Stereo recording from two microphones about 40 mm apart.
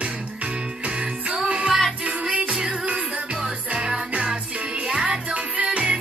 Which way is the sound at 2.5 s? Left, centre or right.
Centre.